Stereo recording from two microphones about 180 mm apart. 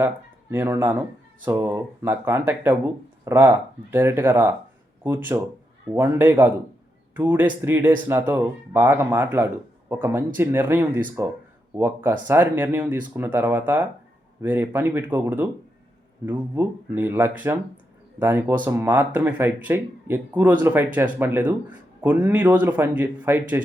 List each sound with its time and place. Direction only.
0.5 s speech: 10° right (ahead or behind)